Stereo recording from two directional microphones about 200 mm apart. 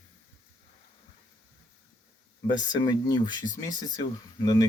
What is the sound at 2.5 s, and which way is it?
Speech, 20° left (ahead or behind).